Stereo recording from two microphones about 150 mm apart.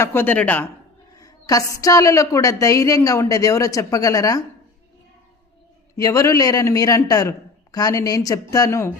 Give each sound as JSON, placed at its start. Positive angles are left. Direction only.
{"t": 0.0, "sound": "speech", "side_deg": 15}
{"t": 1.1, "sound": "a woman's voice", "side_deg": 25}
{"t": 6.0, "sound": "a woman's voice", "side_deg": 25}